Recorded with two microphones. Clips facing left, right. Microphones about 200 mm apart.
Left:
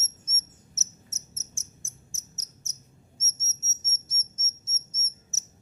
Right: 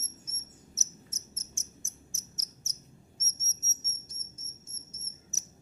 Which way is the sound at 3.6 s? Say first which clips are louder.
Even; 5° left (ahead or behind).